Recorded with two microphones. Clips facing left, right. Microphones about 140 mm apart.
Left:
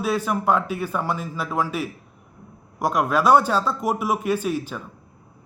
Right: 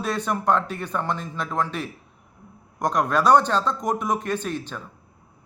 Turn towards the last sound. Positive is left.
turn(degrees=5)  # may be behind; listen again after turning